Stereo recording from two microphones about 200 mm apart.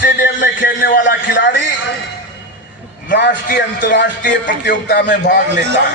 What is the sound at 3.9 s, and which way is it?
Music, 65° left (ahead or behind).